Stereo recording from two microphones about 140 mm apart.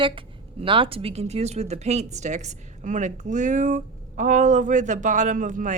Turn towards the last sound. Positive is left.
turn(degrees=-65)  # may be behind; listen again after turning